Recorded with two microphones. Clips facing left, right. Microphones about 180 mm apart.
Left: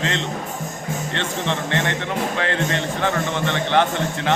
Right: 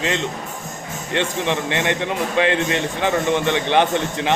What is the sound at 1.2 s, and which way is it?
A man's voice, 15° right (ahead or behind).